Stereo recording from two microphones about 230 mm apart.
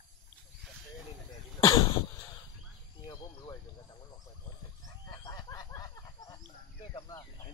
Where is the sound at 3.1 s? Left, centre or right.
Centre.